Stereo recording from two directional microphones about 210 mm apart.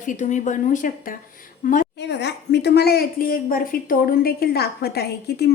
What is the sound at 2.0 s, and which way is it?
A woman's voice, 55° left (ahead or behind).